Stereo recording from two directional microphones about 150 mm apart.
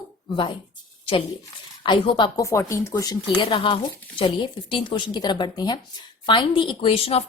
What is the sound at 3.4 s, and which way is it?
A woman's voice, 35° left (ahead or behind).